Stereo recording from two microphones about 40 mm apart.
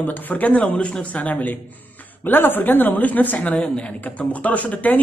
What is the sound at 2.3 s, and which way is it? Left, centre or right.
Speech, left.